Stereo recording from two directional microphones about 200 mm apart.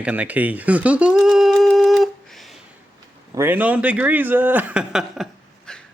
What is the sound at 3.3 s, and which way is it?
A man's voice, 10° right (ahead or behind).